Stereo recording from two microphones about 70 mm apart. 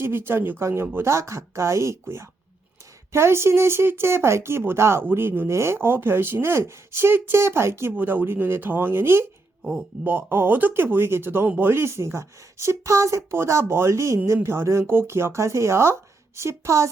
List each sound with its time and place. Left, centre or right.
0.0 s speech: right